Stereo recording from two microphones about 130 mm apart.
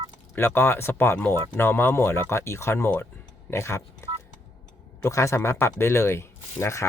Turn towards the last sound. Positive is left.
turn(degrees=20)  # may be behind; listen again after turning